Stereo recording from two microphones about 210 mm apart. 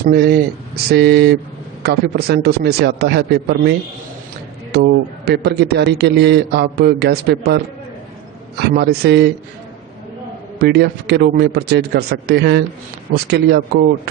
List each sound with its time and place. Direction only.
0.0 s a man's voice: 50° right (ahead or behind)
10.6 s a man's voice: 50° right (ahead or behind)